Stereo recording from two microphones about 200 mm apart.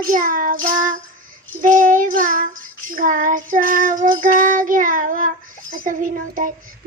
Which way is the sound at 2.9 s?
40° right (ahead or behind).